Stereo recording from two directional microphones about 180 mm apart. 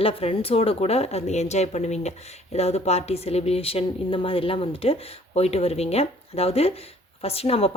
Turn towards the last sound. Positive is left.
turn(degrees=35)  # may be behind; listen again after turning